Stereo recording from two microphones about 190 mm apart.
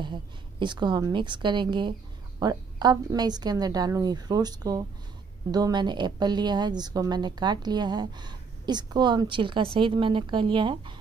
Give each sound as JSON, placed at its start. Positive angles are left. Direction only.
{"t": 0.0, "sound": "a woman's voice", "side_deg": -25}